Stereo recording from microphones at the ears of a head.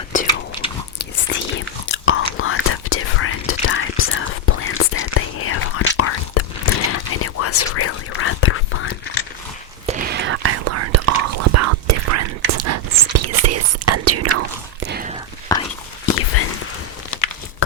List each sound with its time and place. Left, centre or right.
1.3 s whispering: left
9.8 s whispering: right
16.0 s a sound: left